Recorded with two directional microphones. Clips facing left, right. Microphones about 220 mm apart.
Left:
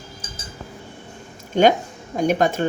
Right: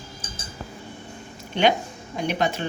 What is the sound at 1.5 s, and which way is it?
Speech, 45° left (ahead or behind).